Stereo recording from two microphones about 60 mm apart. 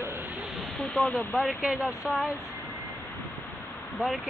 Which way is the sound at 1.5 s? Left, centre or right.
Right.